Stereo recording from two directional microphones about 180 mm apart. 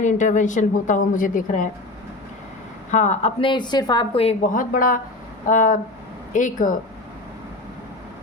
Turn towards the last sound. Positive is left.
turn(degrees=45)  # may be behind; listen again after turning